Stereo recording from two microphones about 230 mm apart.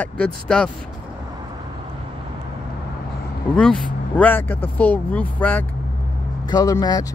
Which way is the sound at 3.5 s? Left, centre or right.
Centre.